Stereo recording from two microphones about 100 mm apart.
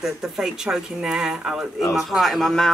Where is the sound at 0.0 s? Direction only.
5° right (ahead or behind).